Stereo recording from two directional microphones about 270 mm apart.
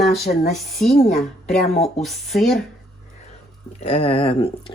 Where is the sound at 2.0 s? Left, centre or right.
Centre.